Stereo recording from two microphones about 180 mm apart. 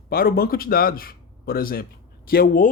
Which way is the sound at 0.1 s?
55° left (ahead or behind).